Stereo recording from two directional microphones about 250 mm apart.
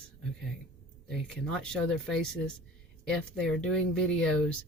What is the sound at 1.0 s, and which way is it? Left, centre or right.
Speech, centre.